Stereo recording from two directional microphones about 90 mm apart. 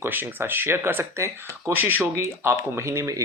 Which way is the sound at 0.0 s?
25° right (ahead or behind).